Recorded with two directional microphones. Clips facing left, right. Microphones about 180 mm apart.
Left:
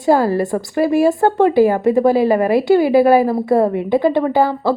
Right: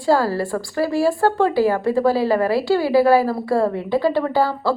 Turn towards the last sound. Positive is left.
turn(degrees=20)  # may be behind; listen again after turning